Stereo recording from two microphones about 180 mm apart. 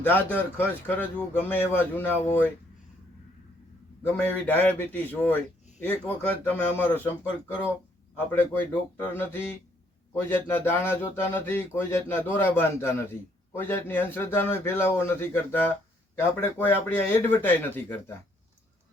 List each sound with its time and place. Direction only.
0.0 s a man's voice: 10° left (ahead or behind)
4.0 s a man's voice: 10° left (ahead or behind)